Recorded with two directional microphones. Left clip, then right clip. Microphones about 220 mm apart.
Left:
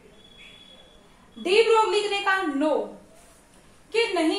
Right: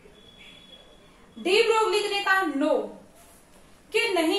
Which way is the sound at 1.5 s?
20° left (ahead or behind).